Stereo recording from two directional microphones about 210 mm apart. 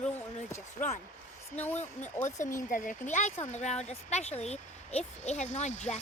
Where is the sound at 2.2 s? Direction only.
40° left (ahead or behind).